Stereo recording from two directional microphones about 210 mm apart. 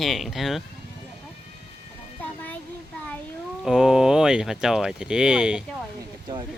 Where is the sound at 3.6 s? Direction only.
Centre (ahead or behind).